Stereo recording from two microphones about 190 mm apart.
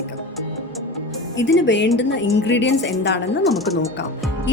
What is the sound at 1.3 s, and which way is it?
A woman's voice, 70° left (ahead or behind).